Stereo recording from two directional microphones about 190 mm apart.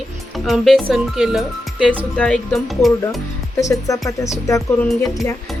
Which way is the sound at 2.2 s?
5° left (ahead or behind).